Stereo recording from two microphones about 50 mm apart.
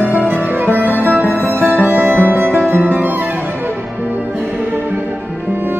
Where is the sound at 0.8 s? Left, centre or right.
Left.